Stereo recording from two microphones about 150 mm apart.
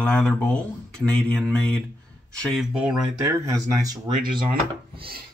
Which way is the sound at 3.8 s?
25° right (ahead or behind).